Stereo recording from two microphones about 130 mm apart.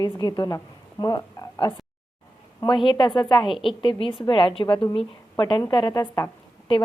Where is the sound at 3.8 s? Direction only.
40° left (ahead or behind).